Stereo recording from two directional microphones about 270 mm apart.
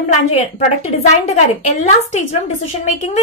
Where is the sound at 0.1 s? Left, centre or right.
Left.